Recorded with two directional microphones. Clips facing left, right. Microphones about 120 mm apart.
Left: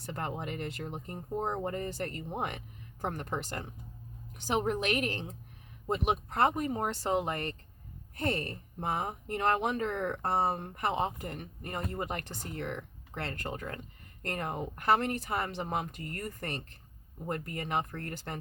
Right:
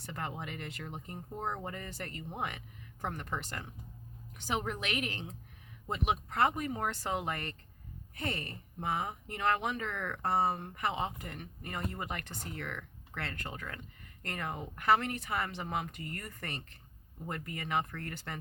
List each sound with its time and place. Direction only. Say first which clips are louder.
0.0 s speech: left 3 dB; 40° left (ahead or behind)